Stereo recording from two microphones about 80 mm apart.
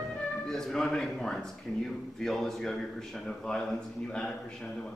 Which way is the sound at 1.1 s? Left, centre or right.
Centre.